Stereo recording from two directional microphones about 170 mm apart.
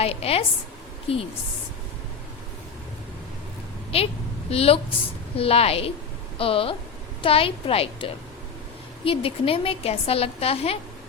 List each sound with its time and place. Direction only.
0.0 s a woman's voice: 35° left (ahead or behind)
3.9 s a woman's voice: 35° left (ahead or behind)